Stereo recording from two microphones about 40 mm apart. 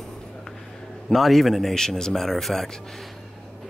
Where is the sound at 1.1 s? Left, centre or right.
Centre.